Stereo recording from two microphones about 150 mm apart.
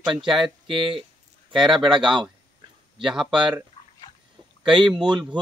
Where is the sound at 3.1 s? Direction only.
5° right (ahead or behind).